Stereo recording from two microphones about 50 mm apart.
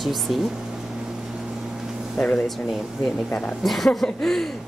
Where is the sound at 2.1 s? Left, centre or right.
Left.